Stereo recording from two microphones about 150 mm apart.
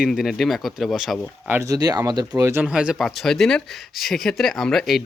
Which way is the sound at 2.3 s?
15° right (ahead or behind).